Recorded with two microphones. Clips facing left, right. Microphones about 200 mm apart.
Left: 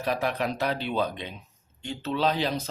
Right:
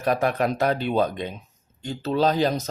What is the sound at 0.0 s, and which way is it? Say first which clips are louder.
Speech: right 5 dB; 50° right (ahead or behind).